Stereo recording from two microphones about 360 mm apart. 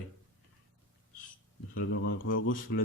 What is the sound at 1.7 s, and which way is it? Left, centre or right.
Speech, left.